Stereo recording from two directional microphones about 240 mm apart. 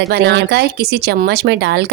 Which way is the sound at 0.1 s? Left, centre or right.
Right.